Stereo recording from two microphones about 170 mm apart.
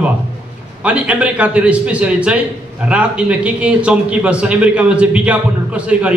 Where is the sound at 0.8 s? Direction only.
5° right (ahead or behind).